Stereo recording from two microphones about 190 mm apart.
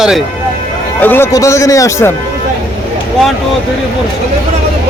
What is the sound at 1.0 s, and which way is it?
Speech, 10° left (ahead or behind).